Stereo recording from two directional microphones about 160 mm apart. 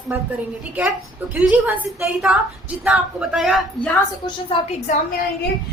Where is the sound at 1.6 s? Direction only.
10° right (ahead or behind).